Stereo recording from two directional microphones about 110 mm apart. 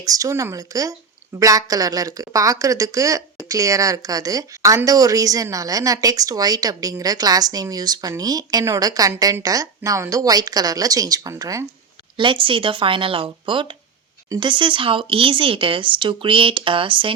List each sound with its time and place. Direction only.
0.0 s a woman's voice: 30° right (ahead or behind)
12.1 s speech: 50° right (ahead or behind)